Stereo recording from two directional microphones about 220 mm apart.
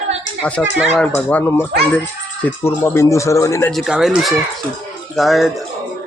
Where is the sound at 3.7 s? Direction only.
Centre (ahead or behind).